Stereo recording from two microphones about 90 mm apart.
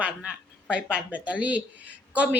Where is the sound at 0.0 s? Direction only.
10° right (ahead or behind).